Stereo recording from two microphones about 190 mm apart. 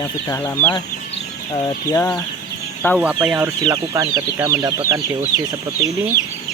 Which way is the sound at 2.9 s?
5° right (ahead or behind).